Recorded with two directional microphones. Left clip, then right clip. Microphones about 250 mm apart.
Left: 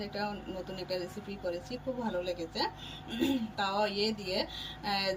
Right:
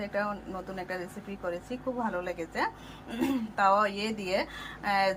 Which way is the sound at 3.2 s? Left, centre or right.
Right.